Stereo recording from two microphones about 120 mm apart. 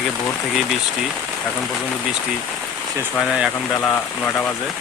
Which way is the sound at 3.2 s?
5° right (ahead or behind).